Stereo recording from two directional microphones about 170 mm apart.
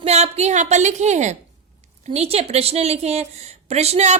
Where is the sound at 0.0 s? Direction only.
40° right (ahead or behind).